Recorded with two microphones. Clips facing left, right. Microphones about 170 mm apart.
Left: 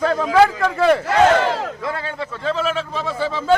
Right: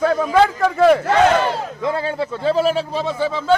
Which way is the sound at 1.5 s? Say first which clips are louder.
Left 1 dB; 90° left.